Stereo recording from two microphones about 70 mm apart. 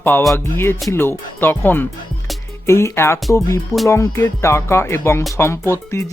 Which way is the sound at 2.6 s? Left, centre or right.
Left.